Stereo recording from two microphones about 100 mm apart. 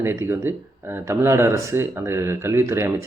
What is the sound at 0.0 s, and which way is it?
Speech, 25° right (ahead or behind).